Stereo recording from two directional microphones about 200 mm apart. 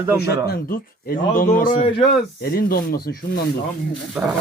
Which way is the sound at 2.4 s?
50° left (ahead or behind).